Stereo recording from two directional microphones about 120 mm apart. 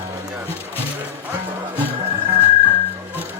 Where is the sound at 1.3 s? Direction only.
15° right (ahead or behind).